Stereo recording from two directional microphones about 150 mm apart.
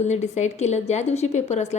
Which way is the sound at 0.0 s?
50° left (ahead or behind).